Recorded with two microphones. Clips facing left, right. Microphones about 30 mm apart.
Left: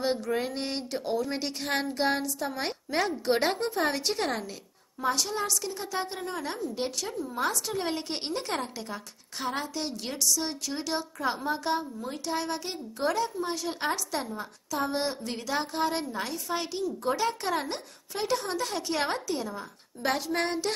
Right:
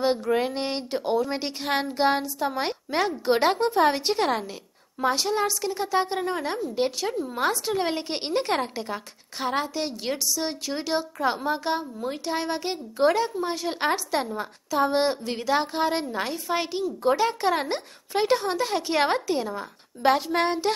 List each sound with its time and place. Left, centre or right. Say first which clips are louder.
0.0 s a woman's voice: right 5 dB; right
7.1 s a woman's voice: right 5 dB; right
13.4 s a woman's voice: right 4 dB; centre
13.7 s a woman's voice: right 5 dB; right
18.4 s a woman's voice: right 6 dB; centre